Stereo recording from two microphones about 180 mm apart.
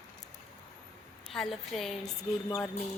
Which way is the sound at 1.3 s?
Centre (ahead or behind).